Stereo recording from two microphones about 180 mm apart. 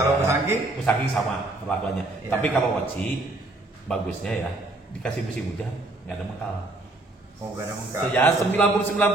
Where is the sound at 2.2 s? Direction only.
10° left (ahead or behind).